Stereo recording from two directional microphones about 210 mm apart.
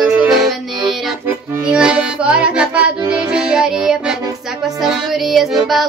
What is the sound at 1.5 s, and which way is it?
Music, 5° right (ahead or behind).